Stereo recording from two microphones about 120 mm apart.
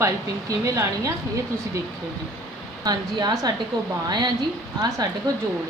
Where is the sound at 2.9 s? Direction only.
35° right (ahead or behind).